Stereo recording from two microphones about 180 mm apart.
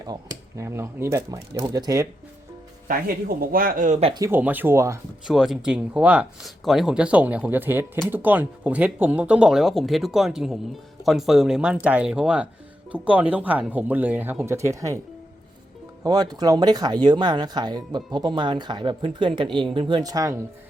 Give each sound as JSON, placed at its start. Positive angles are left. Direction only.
{"t": 0.0, "sound": "speech", "side_deg": -20}
{"t": 2.8, "sound": "speech", "side_deg": -55}
{"t": 4.1, "sound": "speech", "side_deg": -15}
{"t": 5.3, "sound": "speech", "side_deg": 0}
{"t": 16.0, "sound": "speech", "side_deg": -20}